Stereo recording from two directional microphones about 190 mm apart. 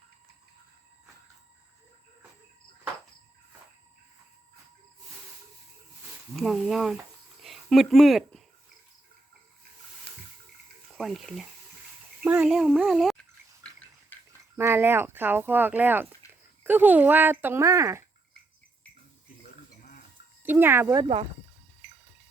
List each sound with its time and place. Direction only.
6.3 s speech: centre (ahead or behind)
10.8 s speech: centre (ahead or behind)
14.1 s bathtub: 10° left (ahead or behind)
14.5 s speech: 15° right (ahead or behind)
19.4 s sheep: 45° left (ahead or behind)
20.4 s speech: 10° right (ahead or behind); by 21.2 s 25° right (ahead or behind)